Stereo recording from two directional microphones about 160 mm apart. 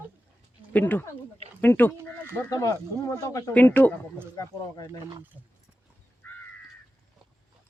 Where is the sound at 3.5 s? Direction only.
10° left (ahead or behind).